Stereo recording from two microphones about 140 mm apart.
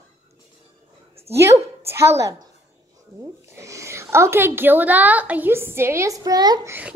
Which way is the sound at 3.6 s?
20° right (ahead or behind).